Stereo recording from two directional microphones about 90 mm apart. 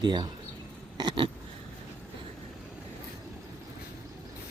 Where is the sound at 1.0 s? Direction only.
65° right (ahead or behind).